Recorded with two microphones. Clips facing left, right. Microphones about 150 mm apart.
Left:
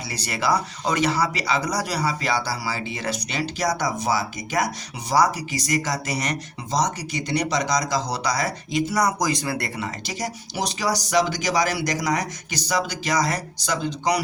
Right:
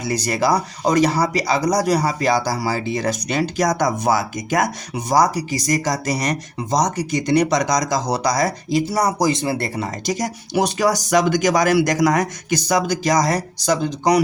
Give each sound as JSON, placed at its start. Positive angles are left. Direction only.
{"t": 0.0, "sound": "speech", "side_deg": -45}